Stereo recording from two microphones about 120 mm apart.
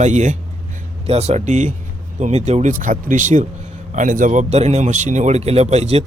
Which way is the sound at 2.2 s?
70° right (ahead or behind).